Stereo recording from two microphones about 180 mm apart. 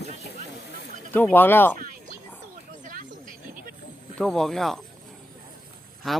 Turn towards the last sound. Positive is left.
turn(degrees=0)  # may be behind; listen again after turning